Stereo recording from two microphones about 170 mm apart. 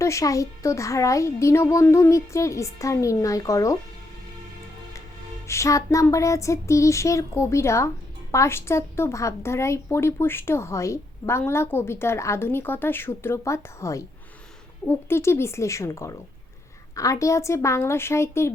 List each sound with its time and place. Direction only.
0.0 s speech: 20° left (ahead or behind)
5.5 s speech: 20° left (ahead or behind)